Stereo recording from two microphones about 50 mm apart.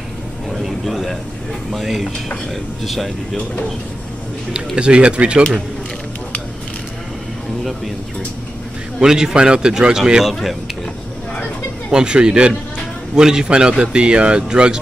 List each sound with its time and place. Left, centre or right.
0.5 s a sound: centre
1.7 s speech: centre
4.7 s speech: right
9.0 s a man's voice: centre
11.9 s a man's voice: centre